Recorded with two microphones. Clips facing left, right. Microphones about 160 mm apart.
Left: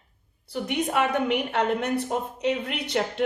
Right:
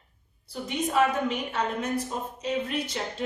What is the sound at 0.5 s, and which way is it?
A woman's voice, 65° left (ahead or behind).